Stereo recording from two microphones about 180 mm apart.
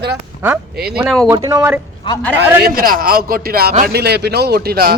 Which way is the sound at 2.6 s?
55° right (ahead or behind).